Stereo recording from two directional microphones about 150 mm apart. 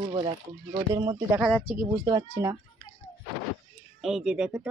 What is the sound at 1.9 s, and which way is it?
Speech, 25° right (ahead or behind).